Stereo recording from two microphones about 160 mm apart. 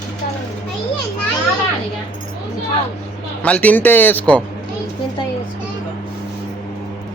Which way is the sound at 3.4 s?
10° left (ahead or behind).